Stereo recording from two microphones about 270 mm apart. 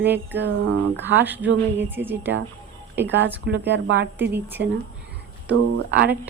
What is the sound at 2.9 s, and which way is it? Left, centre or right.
Speech, right.